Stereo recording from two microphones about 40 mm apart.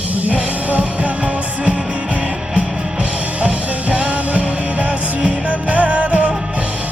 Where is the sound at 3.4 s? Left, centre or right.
Right.